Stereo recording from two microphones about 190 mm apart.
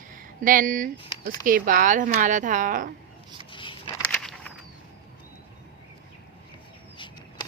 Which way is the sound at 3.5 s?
25° left (ahead or behind).